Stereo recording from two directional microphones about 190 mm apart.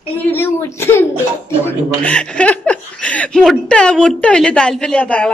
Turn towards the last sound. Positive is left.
turn(degrees=5)  # may be behind; listen again after turning